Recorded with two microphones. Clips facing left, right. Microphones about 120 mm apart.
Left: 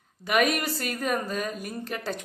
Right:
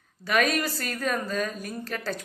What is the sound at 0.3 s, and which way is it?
Speech, 15° left (ahead or behind).